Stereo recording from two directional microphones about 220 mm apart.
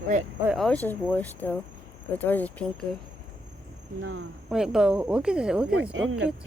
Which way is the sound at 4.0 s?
60° right (ahead or behind).